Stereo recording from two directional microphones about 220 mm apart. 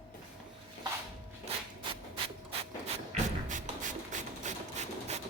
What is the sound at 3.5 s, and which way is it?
Beatboxing, 35° right (ahead or behind).